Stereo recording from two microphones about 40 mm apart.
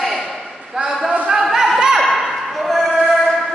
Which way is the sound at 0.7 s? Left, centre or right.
Centre.